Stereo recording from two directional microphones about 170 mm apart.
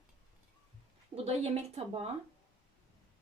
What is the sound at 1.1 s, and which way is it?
Speech, 40° right (ahead or behind).